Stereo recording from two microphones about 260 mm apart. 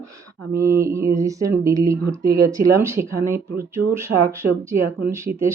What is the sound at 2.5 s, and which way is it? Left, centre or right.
Speech, right.